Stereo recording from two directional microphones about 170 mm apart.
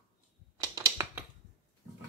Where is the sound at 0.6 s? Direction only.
20° right (ahead or behind).